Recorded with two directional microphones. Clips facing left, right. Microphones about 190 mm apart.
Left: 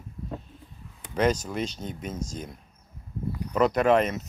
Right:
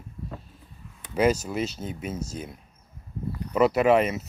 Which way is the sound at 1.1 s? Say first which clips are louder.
Right 2 dB; 10° right (ahead or behind).